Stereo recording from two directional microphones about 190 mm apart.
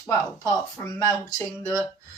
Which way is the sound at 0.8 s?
15° left (ahead or behind).